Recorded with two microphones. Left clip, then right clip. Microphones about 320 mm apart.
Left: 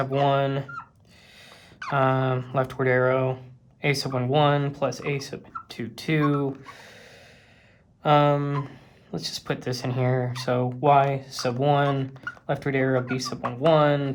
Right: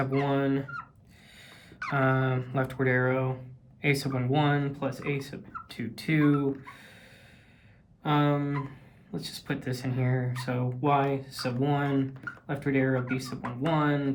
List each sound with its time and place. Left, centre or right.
0.0 s speech: centre